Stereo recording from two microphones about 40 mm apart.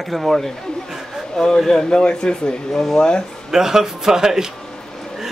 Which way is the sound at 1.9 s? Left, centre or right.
Left.